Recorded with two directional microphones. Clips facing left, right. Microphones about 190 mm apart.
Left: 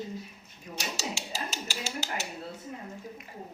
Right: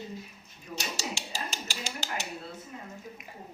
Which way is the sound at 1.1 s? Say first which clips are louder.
Left 1 dB; 5° left (ahead or behind).